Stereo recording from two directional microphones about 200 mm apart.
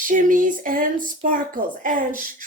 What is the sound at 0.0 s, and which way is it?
Speech, 40° right (ahead or behind).